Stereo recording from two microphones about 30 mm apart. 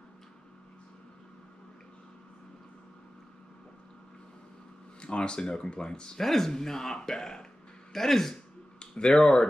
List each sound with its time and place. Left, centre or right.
5.0 s speech: left
6.1 s speech: centre
8.7 s a sound: left
9.2 s speech: left